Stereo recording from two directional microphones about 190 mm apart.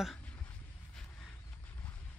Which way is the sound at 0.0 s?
5° left (ahead or behind).